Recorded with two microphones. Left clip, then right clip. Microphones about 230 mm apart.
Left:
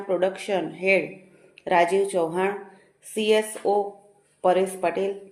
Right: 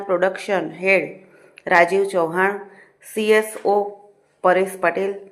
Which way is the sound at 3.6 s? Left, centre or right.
Right.